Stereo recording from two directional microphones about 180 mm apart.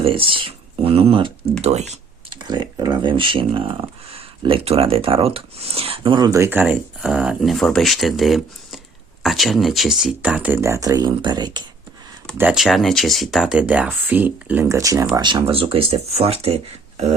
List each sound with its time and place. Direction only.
0.0 s speech: 30° right (ahead or behind)
1.6 s computer keyboard: 40° right (ahead or behind)
2.4 s speech: 25° right (ahead or behind)
12.4 s speech: 5° right (ahead or behind); by 16.6 s 35° right (ahead or behind)